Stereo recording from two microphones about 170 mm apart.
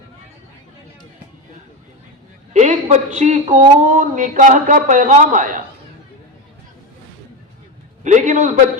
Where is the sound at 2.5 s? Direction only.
45° right (ahead or behind).